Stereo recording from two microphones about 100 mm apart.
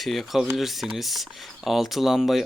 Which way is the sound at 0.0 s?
Centre (ahead or behind).